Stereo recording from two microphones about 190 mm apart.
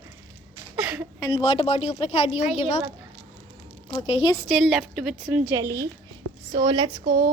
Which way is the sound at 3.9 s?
30° left (ahead or behind).